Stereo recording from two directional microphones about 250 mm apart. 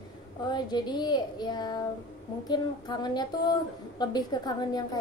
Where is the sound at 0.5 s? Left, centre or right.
Centre.